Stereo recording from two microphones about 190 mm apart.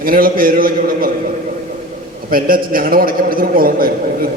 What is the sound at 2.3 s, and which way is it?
A man's voice, 50° right (ahead or behind).